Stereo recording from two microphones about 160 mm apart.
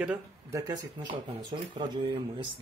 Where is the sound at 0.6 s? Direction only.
25° right (ahead or behind).